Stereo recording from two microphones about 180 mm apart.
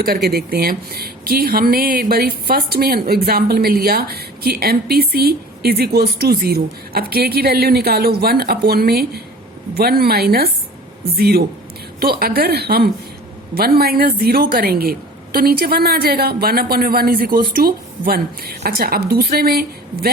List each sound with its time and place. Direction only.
0.0 s speech: 60° right (ahead or behind)